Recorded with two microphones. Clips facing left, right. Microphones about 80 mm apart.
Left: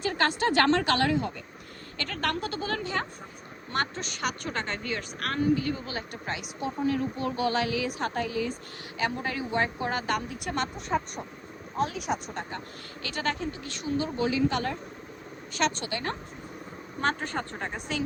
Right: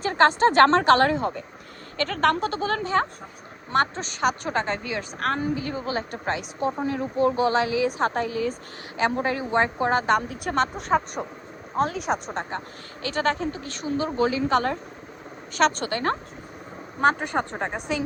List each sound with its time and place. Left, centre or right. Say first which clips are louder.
0.0 s a woman's voice: right 8 dB; right
6.8 s a woman's voice: right 4 dB; right
11.8 s a woman's voice: right 5 dB; right
17.0 s a woman's voice: right 7 dB; centre